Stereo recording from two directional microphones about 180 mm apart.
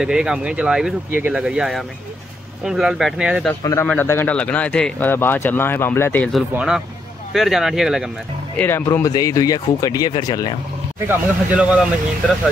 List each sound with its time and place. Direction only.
0.0 s speech: 5° right (ahead or behind)
3.8 s speech: 10° left (ahead or behind)
6.5 s speech: 5° right (ahead or behind)
8.5 s speech: 15° left (ahead or behind)
11.1 s speech: 10° right (ahead or behind)